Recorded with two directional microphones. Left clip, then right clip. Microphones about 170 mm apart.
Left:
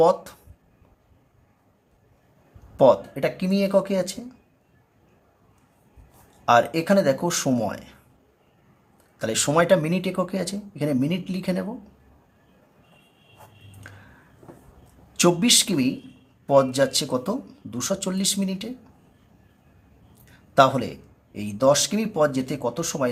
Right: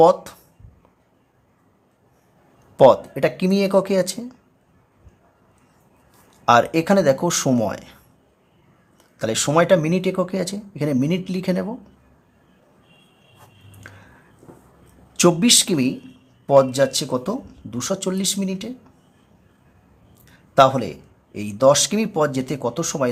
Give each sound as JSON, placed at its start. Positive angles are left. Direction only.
{"t": 0.0, "sound": "speech", "side_deg": -20}
{"t": 2.7, "sound": "speech", "side_deg": -25}
{"t": 6.4, "sound": "speech", "side_deg": -25}
{"t": 9.1, "sound": "speech", "side_deg": -15}
{"t": 13.8, "sound": "a sound", "side_deg": -20}
{"t": 15.1, "sound": "speech", "side_deg": -15}
{"t": 20.3, "sound": "speech", "side_deg": -15}